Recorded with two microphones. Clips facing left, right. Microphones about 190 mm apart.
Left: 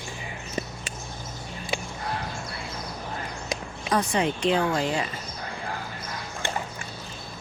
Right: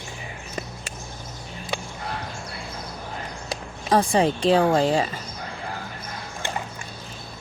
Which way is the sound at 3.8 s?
30° right (ahead or behind).